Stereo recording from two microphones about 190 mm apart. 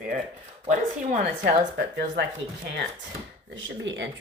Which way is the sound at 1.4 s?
60° right (ahead or behind).